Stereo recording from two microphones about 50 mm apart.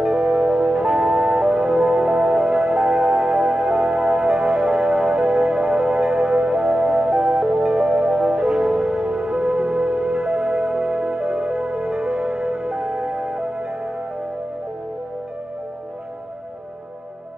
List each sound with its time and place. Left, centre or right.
0.0 s music: centre
8.0 s music: centre